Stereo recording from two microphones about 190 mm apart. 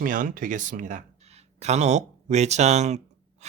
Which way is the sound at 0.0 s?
45° right (ahead or behind).